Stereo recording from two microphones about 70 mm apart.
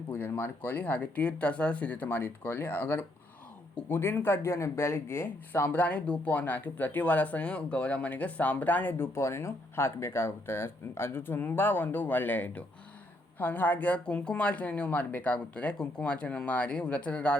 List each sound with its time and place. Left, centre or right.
0.1 s speech: left
9.1 s speech: left; by 17.3 s centre